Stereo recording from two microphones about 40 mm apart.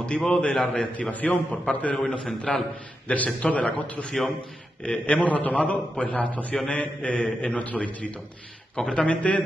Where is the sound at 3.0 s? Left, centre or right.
Left.